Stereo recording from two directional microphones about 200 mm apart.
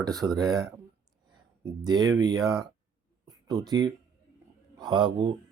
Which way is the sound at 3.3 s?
20° right (ahead or behind).